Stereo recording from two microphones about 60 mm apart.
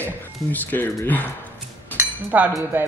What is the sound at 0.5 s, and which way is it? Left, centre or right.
Speech, left.